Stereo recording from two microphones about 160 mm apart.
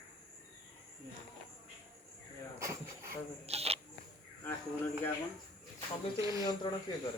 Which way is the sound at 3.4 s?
40° right (ahead or behind).